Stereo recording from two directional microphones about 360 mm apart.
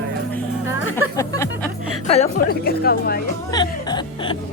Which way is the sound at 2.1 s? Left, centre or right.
Centre.